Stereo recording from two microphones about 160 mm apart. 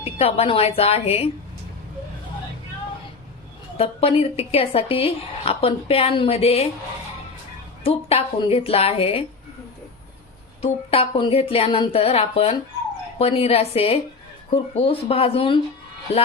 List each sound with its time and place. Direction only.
0.0 s a woman's voice: 40° left (ahead or behind)
3.8 s a woman's voice: 40° left (ahead or behind)
7.9 s a woman's voice: 40° left (ahead or behind)
10.6 s a woman's voice: 40° left (ahead or behind)